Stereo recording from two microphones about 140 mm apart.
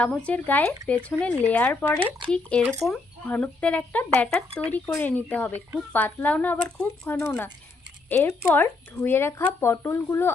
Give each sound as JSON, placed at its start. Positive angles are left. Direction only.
{"t": 0.0, "sound": "speech", "side_deg": 10}